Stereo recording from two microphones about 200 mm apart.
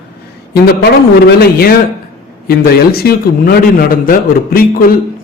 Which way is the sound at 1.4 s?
50° left (ahead or behind).